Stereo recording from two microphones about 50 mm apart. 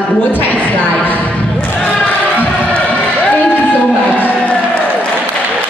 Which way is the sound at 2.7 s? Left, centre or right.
Left.